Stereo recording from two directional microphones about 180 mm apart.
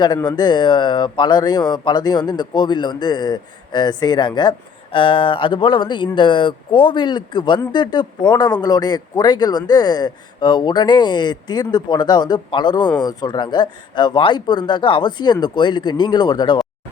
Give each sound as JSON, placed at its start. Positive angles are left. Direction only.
{"t": 0.3, "sound": "speech", "side_deg": 25}